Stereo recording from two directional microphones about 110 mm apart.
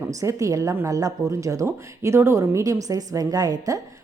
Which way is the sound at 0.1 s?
30° right (ahead or behind).